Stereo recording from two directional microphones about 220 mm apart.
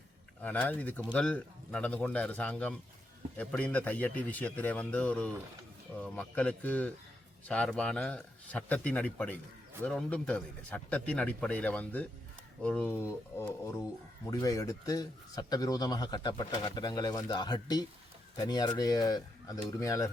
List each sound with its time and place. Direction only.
0.4 s a man's voice: 5° left (ahead or behind)